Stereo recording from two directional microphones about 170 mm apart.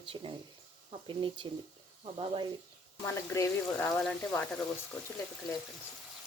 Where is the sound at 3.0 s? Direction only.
20° left (ahead or behind).